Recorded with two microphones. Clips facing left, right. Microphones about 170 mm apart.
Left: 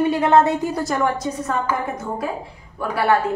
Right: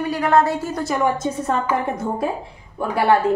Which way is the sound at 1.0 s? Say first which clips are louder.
Right 1 dB; 25° right (ahead or behind).